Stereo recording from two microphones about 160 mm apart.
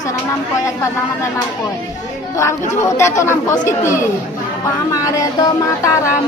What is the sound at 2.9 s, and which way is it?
A woman's voice, 15° left (ahead or behind).